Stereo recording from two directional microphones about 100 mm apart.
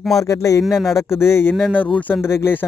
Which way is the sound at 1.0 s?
25° left (ahead or behind).